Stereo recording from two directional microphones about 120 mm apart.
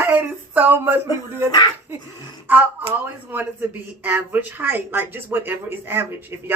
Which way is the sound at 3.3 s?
15° right (ahead or behind).